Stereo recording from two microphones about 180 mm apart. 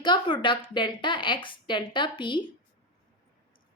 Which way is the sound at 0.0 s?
25° left (ahead or behind).